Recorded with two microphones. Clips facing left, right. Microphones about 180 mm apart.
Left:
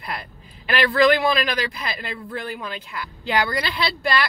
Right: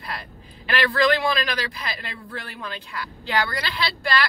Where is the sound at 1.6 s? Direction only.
25° left (ahead or behind).